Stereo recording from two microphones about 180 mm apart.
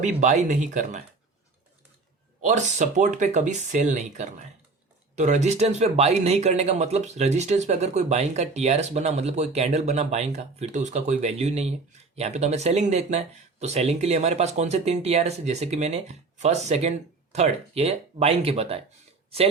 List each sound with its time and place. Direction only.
0.2 s speech: 45° right (ahead or behind)
2.4 s speech: 45° right (ahead or behind)